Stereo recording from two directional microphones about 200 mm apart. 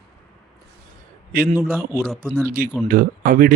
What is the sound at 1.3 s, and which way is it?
Speech, 45° right (ahead or behind).